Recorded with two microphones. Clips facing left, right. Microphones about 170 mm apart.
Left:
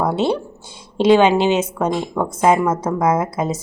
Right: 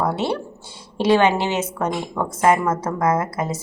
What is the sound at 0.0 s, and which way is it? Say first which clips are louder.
A woman's voice: left 4 dB; 20° left (ahead or behind).